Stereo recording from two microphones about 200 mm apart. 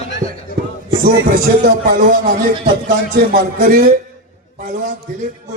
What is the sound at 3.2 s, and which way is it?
A man's voice, 45° right (ahead or behind).